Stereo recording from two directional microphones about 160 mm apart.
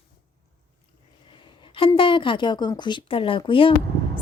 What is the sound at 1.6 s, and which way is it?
A woman's voice, 35° left (ahead or behind).